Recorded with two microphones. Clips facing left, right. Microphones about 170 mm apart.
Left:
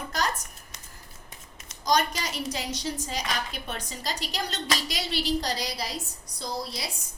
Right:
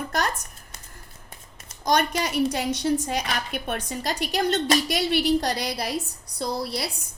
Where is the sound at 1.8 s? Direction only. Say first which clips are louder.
Right 3 dB; 60° right (ahead or behind).